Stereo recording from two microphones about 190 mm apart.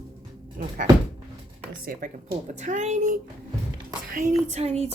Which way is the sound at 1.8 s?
45° right (ahead or behind).